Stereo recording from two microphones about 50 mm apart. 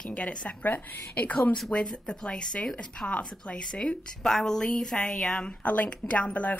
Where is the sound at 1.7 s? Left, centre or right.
Centre.